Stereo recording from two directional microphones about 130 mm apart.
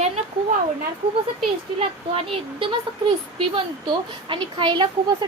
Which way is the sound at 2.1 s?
45° right (ahead or behind).